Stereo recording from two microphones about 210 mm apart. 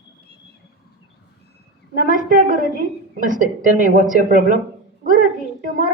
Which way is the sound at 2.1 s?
40° right (ahead or behind).